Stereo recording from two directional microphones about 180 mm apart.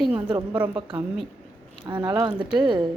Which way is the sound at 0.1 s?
25° right (ahead or behind).